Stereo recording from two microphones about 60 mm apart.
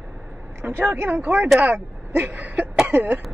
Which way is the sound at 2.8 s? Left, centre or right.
Right.